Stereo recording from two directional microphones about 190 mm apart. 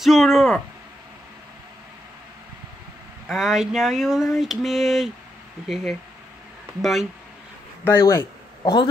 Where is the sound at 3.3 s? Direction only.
Centre (ahead or behind).